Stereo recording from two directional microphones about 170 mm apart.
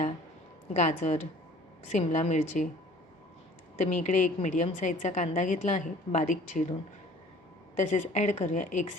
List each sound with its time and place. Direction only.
0.7 s a woman's voice: 45° left (ahead or behind)
3.8 s a woman's voice: 45° left (ahead or behind)
7.8 s a woman's voice: 45° left (ahead or behind)